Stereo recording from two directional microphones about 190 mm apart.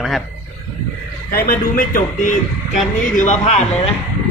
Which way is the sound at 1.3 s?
50° left (ahead or behind).